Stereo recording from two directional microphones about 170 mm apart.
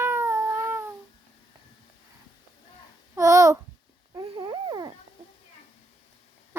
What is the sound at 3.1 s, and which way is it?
Babbling, 20° right (ahead or behind).